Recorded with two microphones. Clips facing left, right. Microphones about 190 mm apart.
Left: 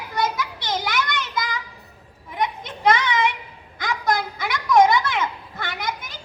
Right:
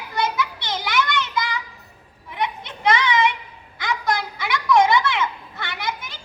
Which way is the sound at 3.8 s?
50° left (ahead or behind).